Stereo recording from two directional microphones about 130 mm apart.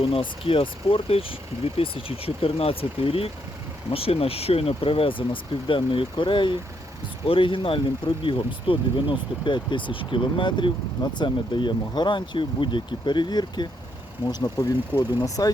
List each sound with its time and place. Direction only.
0.0 s speech: 45° left (ahead or behind); by 15.4 s 25° left (ahead or behind)